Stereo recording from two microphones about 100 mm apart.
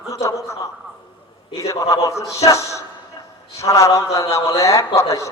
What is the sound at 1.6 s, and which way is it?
A man's voice, 30° left (ahead or behind).